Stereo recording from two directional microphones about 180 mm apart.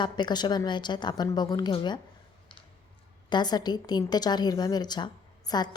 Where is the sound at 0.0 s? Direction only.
25° left (ahead or behind).